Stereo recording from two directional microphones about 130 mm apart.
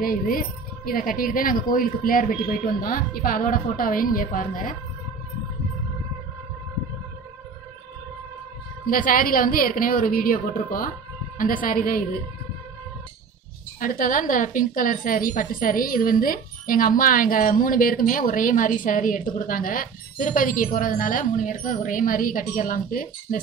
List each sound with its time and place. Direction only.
0.1 s a woman's voice: 90° left
8.9 s a woman's voice: 90° left
13.7 s a woman's voice: 90° left